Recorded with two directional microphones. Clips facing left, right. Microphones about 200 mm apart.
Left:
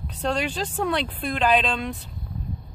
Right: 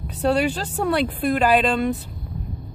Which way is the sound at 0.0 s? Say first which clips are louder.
Right 6 dB; 10° right (ahead or behind).